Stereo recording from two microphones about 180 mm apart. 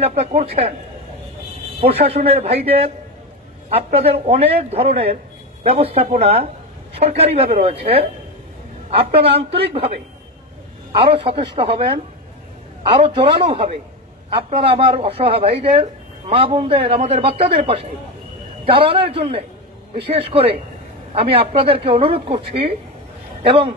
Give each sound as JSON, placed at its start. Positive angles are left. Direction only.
{"t": 0.0, "sound": "speech", "side_deg": -35}
{"t": 2.2, "sound": "speech", "side_deg": -35}
{"t": 9.5, "sound": "speech", "side_deg": -30}
{"t": 12.8, "sound": "speech", "side_deg": -30}